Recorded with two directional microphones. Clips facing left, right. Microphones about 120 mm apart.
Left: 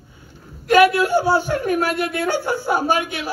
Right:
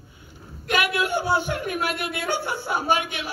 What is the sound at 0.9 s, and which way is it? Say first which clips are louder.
Speech: left 6 dB; 35° left (ahead or behind).